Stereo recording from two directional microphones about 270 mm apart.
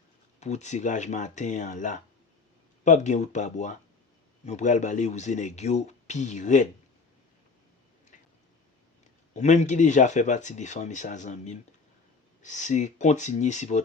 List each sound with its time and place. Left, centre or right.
0.3 s speech: left
9.3 s speech: left